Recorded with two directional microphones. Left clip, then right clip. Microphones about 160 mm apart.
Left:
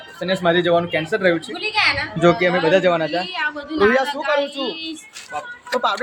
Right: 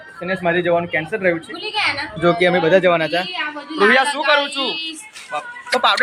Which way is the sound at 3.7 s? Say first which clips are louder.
Right 3 dB; 90° left.